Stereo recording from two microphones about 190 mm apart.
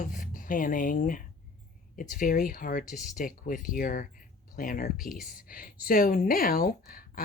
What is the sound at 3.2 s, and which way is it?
A woman's voice, 45° left (ahead or behind).